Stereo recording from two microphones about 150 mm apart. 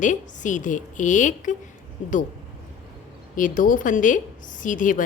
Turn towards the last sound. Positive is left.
turn(degrees=60)  # may be behind; listen again after turning